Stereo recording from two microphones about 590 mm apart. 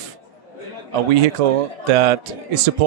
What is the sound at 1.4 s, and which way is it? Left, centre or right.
Speech, right.